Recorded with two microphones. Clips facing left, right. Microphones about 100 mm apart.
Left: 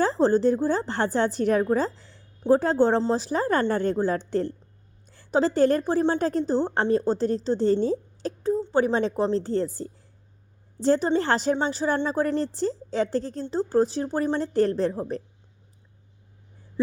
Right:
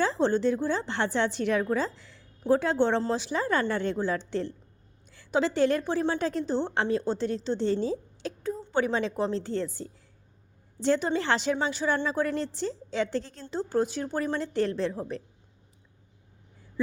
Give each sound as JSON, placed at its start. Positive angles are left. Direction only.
{"t": 0.0, "sound": "a woman's voice", "side_deg": 40}